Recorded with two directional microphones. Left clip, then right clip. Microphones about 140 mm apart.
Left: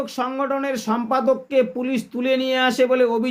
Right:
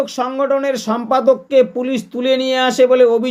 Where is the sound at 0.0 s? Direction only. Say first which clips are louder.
Right 6 dB; 20° right (ahead or behind).